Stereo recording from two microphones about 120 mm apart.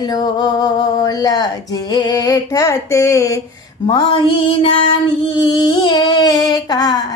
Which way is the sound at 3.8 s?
45° left (ahead or behind).